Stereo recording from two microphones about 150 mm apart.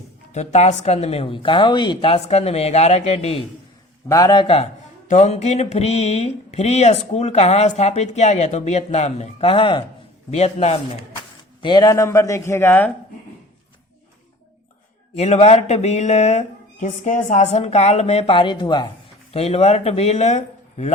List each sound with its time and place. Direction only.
0.3 s speech: 50° left (ahead or behind)
4.1 s speech: 25° left (ahead or behind)
5.0 s speech: 50° left (ahead or behind); by 9.8 s 35° left (ahead or behind)
10.3 s speech: 45° left (ahead or behind)
11.6 s a man's voice: 30° left (ahead or behind); by 12.9 s 15° left (ahead or behind)
15.1 s speech: 45° left (ahead or behind)
16.8 s speech: 60° left (ahead or behind); by 18.9 s 30° left (ahead or behind)
19.3 s speech: 45° left (ahead or behind)